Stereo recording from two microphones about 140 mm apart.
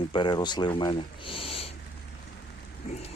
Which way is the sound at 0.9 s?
40° left (ahead or behind).